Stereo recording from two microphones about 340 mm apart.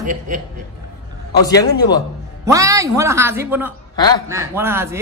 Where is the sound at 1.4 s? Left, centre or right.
Centre.